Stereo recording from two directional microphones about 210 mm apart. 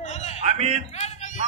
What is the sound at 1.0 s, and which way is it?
Music, 35° left (ahead or behind).